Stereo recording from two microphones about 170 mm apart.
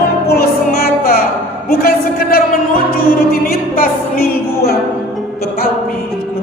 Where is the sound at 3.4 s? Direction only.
60° left (ahead or behind).